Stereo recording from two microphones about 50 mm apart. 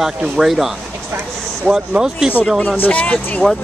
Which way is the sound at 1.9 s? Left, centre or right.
Centre.